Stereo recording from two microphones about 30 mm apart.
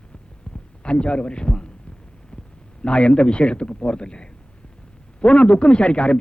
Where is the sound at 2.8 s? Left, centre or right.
Left.